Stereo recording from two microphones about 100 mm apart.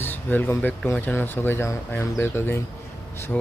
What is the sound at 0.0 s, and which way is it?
Speech, 20° left (ahead or behind).